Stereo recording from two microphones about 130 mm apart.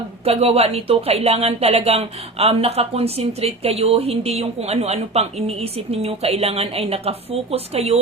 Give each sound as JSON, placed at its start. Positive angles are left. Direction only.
{"t": 0.3, "sound": "speech", "side_deg": -50}